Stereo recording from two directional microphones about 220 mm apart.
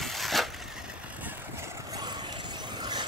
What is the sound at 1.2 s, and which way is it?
Vehicle, 10° right (ahead or behind).